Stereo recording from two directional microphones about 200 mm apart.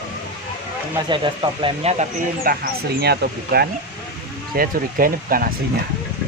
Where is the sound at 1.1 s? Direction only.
25° right (ahead or behind).